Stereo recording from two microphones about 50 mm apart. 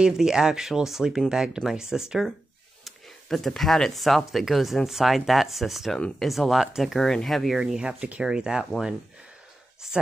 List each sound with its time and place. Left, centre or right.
0.0 s speech: centre
2.8 s speech: centre
7.5 s speech: centre
7.8 s speech: right